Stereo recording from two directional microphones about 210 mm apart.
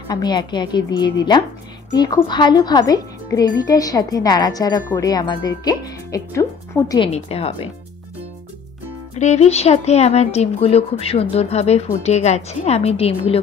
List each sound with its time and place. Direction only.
0.1 s a woman's voice: 20° left (ahead or behind)
7.1 s a woman's voice: 30° left (ahead or behind)
9.1 s speech: 30° left (ahead or behind)